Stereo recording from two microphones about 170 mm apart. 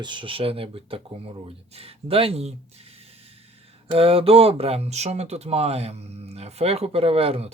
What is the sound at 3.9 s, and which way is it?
Speech, 35° right (ahead or behind).